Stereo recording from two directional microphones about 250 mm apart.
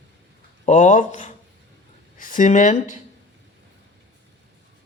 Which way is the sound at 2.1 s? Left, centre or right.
Left.